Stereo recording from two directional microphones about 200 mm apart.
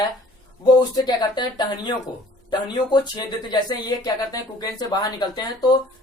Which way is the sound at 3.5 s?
20° left (ahead or behind).